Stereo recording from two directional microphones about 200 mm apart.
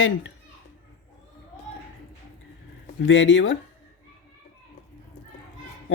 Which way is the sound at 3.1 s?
70° left (ahead or behind).